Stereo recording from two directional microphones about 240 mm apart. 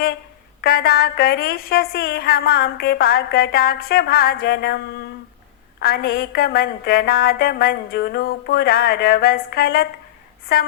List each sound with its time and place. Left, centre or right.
0.6 s a woman's voice: left
5.8 s a woman's voice: left